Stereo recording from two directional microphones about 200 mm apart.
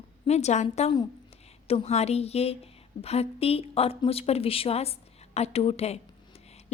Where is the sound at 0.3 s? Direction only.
35° left (ahead or behind).